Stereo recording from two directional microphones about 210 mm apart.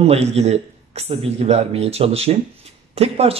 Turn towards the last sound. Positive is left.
turn(degrees=-30)  # may be behind; listen again after turning